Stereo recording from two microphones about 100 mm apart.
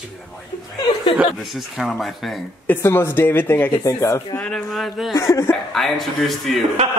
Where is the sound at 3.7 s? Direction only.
35° left (ahead or behind).